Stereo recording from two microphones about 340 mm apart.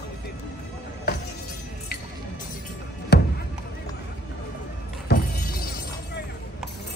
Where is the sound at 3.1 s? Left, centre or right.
Left.